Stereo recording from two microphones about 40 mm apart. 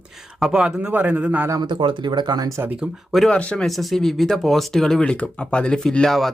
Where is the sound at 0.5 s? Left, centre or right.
Centre.